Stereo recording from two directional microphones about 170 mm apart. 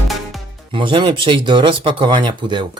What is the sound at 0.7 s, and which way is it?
Speech, 30° right (ahead or behind).